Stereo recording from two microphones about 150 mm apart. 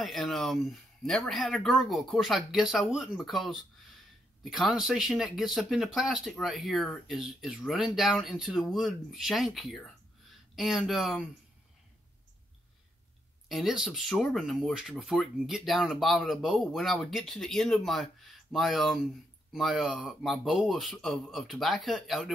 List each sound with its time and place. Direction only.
0.0 s speech: centre (ahead or behind)
13.5 s speech: centre (ahead or behind)